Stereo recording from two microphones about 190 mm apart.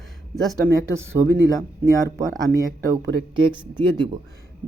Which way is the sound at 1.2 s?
20° right (ahead or behind).